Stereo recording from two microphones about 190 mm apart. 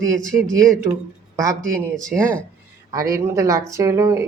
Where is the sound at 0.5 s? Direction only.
15° right (ahead or behind).